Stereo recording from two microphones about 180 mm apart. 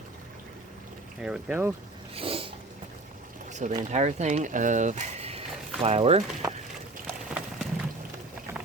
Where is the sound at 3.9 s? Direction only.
40° right (ahead or behind).